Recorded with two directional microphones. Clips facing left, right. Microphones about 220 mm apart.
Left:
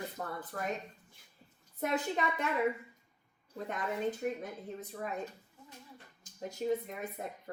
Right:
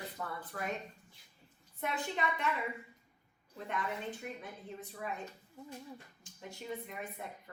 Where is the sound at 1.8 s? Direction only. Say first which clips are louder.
Left 4 dB; 40° left (ahead or behind).